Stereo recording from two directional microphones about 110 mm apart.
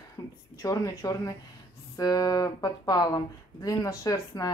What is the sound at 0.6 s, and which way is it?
A woman's voice, 35° left (ahead or behind).